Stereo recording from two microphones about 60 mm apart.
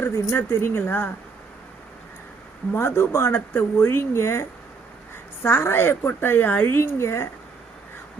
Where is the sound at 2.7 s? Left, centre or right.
Left.